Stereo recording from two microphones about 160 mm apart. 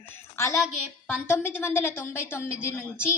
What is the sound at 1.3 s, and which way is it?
A woman's voice, 15° left (ahead or behind).